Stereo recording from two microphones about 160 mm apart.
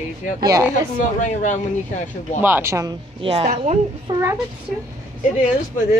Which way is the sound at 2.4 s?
15° right (ahead or behind).